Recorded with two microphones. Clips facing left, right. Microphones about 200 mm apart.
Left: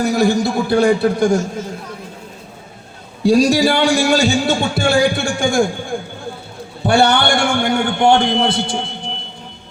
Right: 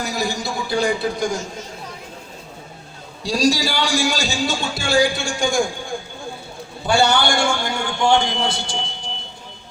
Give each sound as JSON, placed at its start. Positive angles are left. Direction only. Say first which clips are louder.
{"t": 0.0, "sound": "a man's voice", "louder": "left 10 dB", "side_deg": 60}
{"t": 3.2, "sound": "a man's voice", "louder": "left 7 dB", "side_deg": 55}
{"t": 6.8, "sound": "a man's voice", "louder": "left 4 dB", "side_deg": 60}